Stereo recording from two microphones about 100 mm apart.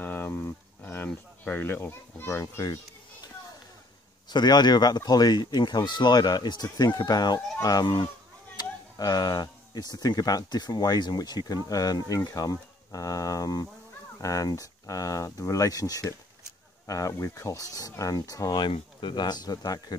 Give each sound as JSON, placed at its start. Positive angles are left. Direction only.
{"t": 0.0, "sound": "a sound", "side_deg": 20}
{"t": 2.5, "sound": "speech", "side_deg": 35}
{"t": 4.3, "sound": "speech", "side_deg": 45}
{"t": 18.6, "sound": "speech", "side_deg": 50}